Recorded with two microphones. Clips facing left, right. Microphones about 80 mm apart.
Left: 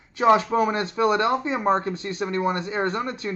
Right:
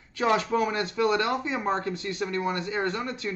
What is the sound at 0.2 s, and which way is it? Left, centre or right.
Speech, left.